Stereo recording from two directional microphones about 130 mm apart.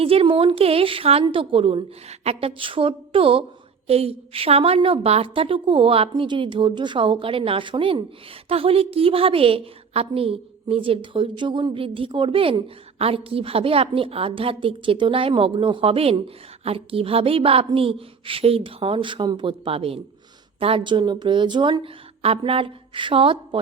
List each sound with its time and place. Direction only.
0.0 s a woman's voice: 45° right (ahead or behind)